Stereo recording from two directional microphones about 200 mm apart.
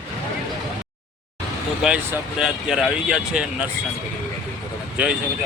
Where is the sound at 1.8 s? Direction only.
5° right (ahead or behind).